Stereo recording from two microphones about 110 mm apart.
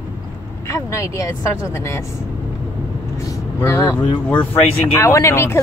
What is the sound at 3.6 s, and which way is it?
Speech, 30° left (ahead or behind).